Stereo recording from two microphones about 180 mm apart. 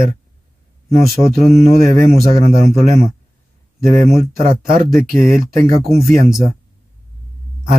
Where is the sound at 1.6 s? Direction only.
50° right (ahead or behind).